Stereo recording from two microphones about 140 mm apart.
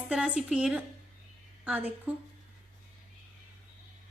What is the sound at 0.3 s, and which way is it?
Speech, 5° right (ahead or behind).